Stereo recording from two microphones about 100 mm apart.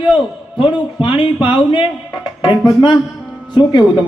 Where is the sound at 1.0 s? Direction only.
60° left (ahead or behind).